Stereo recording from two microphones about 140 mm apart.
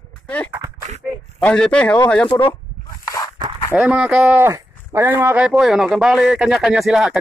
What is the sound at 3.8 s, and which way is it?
Speech, 10° right (ahead or behind).